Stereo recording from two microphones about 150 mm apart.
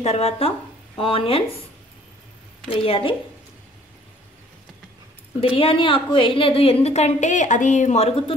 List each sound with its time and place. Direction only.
0.0 s speech: 45° left (ahead or behind)
2.8 s a woman's voice: 35° left (ahead or behind)
5.6 s a woman's voice: 35° left (ahead or behind)